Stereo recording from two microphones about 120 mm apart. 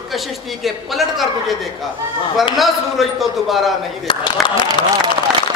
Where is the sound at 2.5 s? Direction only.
Centre (ahead or behind).